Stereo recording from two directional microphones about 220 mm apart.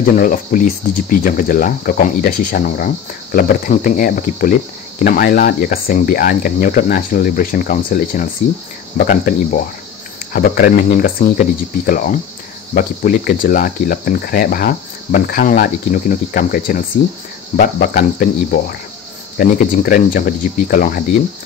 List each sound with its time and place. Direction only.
0.0 s speech: 40° left (ahead or behind)